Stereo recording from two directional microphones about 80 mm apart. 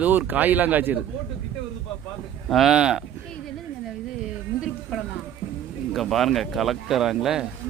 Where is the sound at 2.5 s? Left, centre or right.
Centre.